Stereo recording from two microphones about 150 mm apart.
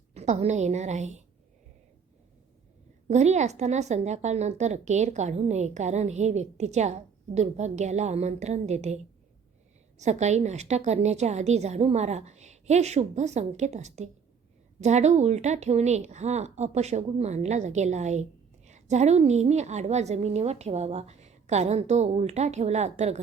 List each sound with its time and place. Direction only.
0.1 s speech: 45° right (ahead or behind)
3.1 s speech: 50° right (ahead or behind)
10.0 s speech: 50° right (ahead or behind)